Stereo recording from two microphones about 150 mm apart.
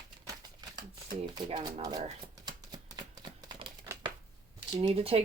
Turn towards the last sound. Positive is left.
turn(degrees=-40)  # may be behind; listen again after turning